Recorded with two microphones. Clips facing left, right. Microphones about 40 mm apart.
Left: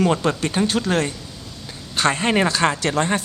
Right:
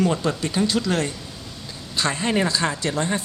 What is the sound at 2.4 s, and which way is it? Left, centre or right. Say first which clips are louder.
Speech: left 4 dB; left.